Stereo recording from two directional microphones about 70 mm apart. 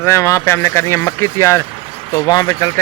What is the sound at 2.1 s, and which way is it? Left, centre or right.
Speech, left.